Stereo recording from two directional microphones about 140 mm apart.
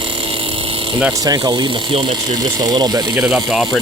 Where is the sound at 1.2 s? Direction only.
25° right (ahead or behind).